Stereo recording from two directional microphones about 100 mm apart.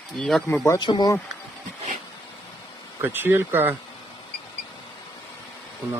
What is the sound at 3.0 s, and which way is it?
Speech, 20° right (ahead or behind).